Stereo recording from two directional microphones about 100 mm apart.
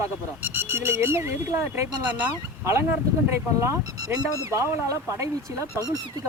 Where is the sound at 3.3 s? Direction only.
25° right (ahead or behind).